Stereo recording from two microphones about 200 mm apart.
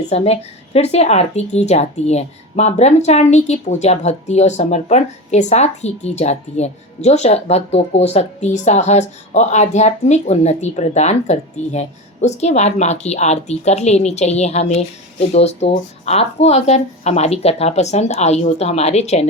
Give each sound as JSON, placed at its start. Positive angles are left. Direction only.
{"t": 0.1, "sound": "a woman's voice", "side_deg": 30}